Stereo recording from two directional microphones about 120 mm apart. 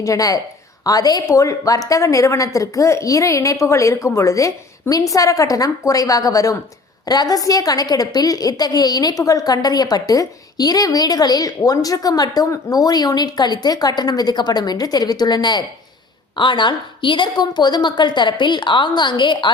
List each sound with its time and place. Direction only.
0.0 s a woman's voice: 30° left (ahead or behind)